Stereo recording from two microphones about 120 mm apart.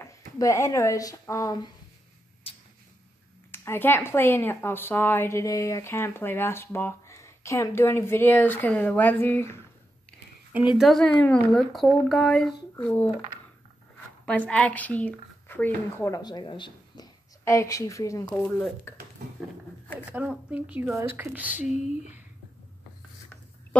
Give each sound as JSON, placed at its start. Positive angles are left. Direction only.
{"t": 0.0, "sound": "speech", "side_deg": 25}
{"t": 2.4, "sound": "tick-tock", "side_deg": 55}
{"t": 3.5, "sound": "speech", "side_deg": 20}
{"t": 10.8, "sound": "speech", "side_deg": 5}
{"t": 11.5, "sound": "speech", "side_deg": 0}
{"t": 12.8, "sound": "speech", "side_deg": 15}
{"t": 14.2, "sound": "a woman's voice", "side_deg": 10}
{"t": 16.1, "sound": "a woman's voice", "side_deg": 35}
{"t": 18.3, "sound": "speech", "side_deg": 10}
{"t": 20.1, "sound": "speech", "side_deg": -10}
{"t": 21.6, "sound": "speech", "side_deg": 75}